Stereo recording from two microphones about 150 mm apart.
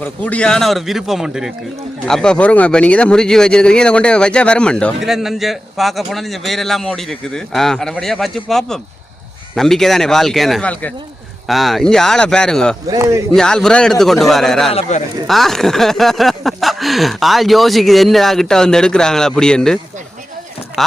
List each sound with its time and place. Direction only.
0.0 s speech: 10° left (ahead or behind)
12.9 s speech: 20° right (ahead or behind)
13.3 s speech: 5° left (ahead or behind)
14.7 s speech: 45° left (ahead or behind)
15.3 s speech: centre (ahead or behind)